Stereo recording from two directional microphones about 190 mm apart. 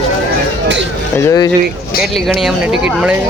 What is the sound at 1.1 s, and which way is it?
Speech, 15° left (ahead or behind).